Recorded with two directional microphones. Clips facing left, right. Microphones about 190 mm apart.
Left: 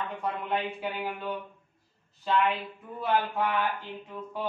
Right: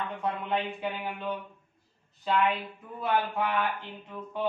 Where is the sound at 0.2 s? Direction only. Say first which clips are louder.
Right 1 dB; centre (ahead or behind).